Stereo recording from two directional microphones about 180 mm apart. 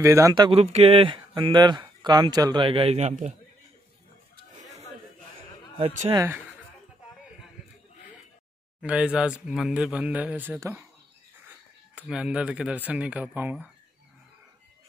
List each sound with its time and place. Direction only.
0.0 s speech: 15° right (ahead or behind); by 3.3 s 40° right (ahead or behind)
5.8 s a man's voice: 35° right (ahead or behind)
6.1 s speech: 15° right (ahead or behind)
8.8 s speech: 5° right (ahead or behind)